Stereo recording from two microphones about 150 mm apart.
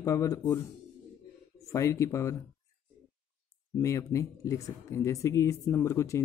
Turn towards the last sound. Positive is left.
turn(degrees=20)  # may be behind; listen again after turning